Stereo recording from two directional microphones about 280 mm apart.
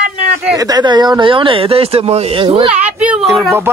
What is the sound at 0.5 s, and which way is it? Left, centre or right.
Speech, centre.